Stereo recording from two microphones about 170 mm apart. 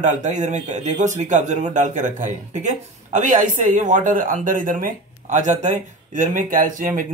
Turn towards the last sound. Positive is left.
turn(degrees=-55)  # may be behind; listen again after turning